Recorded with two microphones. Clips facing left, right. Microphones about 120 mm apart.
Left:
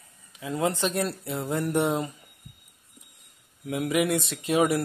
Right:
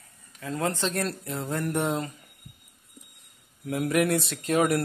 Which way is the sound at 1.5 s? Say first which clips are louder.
Left 2 dB; 10° left (ahead or behind).